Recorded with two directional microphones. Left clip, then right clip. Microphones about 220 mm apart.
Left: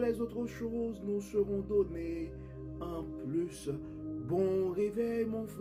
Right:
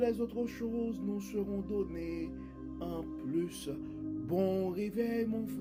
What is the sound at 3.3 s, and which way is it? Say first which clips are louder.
Music: left 1 dB; 30° right (ahead or behind).